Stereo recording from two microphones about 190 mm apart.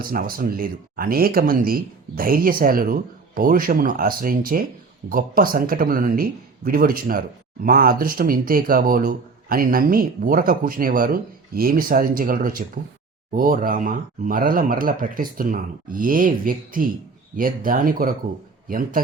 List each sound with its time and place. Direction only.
0.0 s speech: 50° right (ahead or behind)